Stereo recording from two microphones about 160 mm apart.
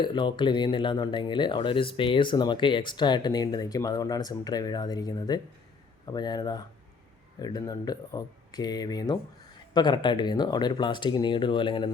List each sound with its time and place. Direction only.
0.0 s speech: 30° left (ahead or behind)